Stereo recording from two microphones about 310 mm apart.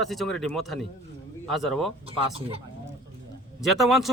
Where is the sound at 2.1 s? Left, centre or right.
Centre.